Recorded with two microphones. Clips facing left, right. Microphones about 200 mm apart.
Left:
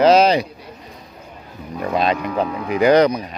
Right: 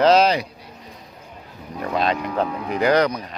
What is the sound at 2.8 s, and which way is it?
Speech, 20° left (ahead or behind).